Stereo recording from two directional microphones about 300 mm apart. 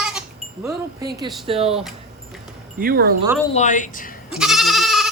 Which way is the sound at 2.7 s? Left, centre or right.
Right.